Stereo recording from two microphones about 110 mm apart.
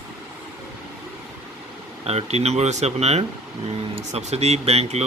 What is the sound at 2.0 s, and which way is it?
Speech, 75° right (ahead or behind).